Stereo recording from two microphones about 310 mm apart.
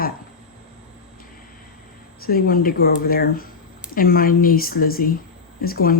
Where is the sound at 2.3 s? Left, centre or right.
Left.